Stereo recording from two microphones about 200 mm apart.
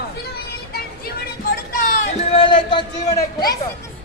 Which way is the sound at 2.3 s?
25° left (ahead or behind).